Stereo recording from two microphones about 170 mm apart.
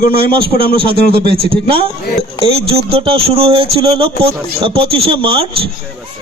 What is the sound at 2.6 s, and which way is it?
Speech, 35° right (ahead or behind).